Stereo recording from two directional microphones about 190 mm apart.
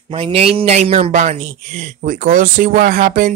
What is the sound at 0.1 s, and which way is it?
A man's voice, 30° right (ahead or behind).